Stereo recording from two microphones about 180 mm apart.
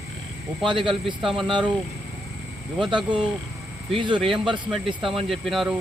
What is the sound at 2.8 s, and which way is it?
Speech, 25° right (ahead or behind).